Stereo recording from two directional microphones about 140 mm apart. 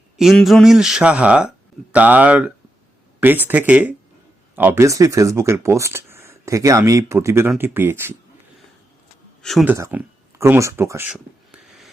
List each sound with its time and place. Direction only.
0.2 s speech: centre (ahead or behind)
9.4 s speech: centre (ahead or behind)
9.6 s speech: 15° right (ahead or behind)
11.1 s owl: centre (ahead or behind)